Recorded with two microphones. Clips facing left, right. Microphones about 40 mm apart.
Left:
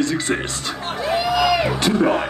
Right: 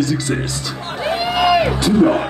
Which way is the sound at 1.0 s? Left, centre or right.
Right.